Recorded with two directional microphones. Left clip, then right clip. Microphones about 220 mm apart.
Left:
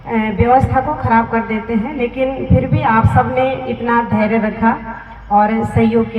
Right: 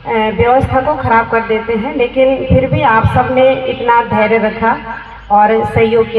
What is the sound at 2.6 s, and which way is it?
A woman's voice, 25° right (ahead or behind).